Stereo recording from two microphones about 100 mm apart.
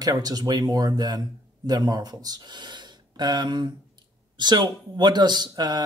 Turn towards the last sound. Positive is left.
turn(degrees=-45)  # may be behind; listen again after turning